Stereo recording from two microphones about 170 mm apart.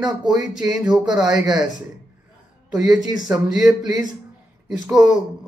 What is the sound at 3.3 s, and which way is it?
Speech, 5° right (ahead or behind).